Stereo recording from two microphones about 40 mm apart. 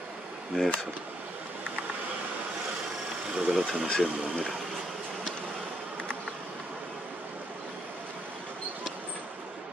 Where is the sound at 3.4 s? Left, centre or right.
Centre.